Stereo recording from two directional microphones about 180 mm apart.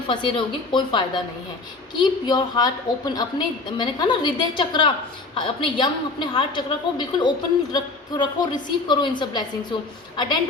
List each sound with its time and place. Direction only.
0.1 s a woman's voice: 25° left (ahead or behind)